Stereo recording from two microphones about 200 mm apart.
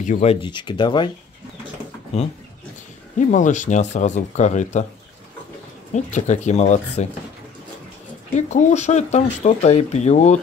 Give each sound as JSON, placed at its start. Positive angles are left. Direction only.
{"t": 0.0, "sound": "speech", "side_deg": 35}
{"t": 3.2, "sound": "speech", "side_deg": 40}
{"t": 5.9, "sound": "speech", "side_deg": 35}
{"t": 8.4, "sound": "speech", "side_deg": 35}